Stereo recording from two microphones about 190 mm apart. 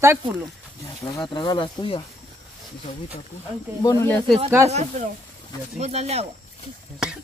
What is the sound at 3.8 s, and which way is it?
Speech, 15° left (ahead or behind).